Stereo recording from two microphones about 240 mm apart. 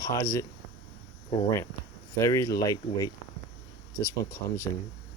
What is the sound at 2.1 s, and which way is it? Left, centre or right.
Speech, centre.